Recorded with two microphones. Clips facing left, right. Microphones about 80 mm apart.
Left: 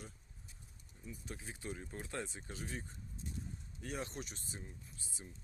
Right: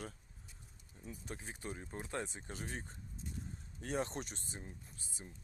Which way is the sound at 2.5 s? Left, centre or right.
Right.